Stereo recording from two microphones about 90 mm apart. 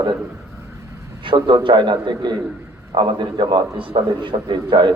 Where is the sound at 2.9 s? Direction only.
70° right (ahead or behind).